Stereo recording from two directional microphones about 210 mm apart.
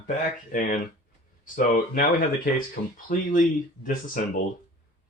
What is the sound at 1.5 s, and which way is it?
Speech, 40° left (ahead or behind).